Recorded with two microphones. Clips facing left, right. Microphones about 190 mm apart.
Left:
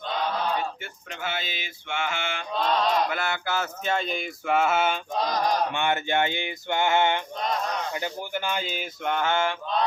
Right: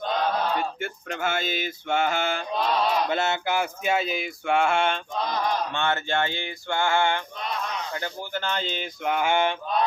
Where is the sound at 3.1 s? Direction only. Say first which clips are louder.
Right 4 dB; 25° right (ahead or behind); by 5.0 s 5° left (ahead or behind).